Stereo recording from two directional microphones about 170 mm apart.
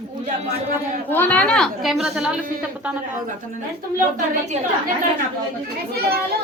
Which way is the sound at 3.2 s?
45° right (ahead or behind).